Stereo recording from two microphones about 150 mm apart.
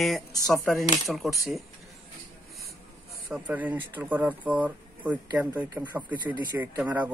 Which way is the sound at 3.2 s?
5° right (ahead or behind).